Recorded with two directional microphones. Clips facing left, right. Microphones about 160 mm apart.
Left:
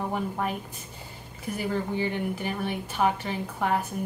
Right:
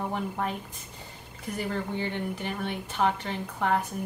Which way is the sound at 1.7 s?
10° left (ahead or behind).